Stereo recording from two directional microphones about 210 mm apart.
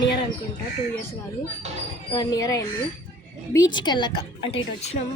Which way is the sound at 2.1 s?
20° left (ahead or behind).